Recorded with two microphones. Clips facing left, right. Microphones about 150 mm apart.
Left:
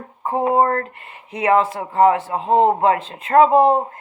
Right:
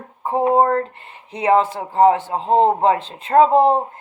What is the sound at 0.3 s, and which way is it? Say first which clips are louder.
A man's voice: right 1 dB; 25° right (ahead or behind).